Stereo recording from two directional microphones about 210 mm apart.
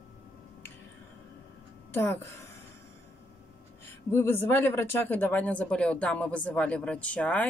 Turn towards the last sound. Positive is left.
turn(degrees=5)  # may be behind; listen again after turning